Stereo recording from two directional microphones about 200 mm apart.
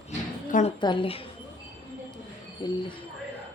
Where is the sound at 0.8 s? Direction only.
25° left (ahead or behind).